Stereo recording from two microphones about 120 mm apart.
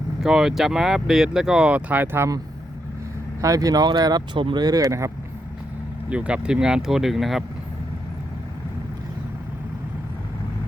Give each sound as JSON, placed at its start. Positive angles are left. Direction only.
{"t": 0.2, "sound": "speech", "side_deg": -5}
{"t": 3.4, "sound": "speech", "side_deg": -30}
{"t": 6.1, "sound": "speech", "side_deg": -10}